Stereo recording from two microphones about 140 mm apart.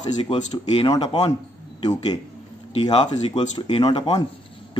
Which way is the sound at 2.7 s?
45° left (ahead or behind).